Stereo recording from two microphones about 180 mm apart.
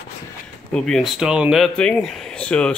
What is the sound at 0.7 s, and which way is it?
Speech, centre (ahead or behind).